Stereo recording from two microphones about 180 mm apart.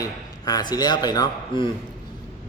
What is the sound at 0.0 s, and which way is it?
A man's voice, 20° left (ahead or behind).